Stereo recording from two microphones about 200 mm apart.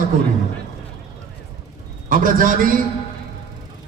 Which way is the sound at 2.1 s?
45° right (ahead or behind).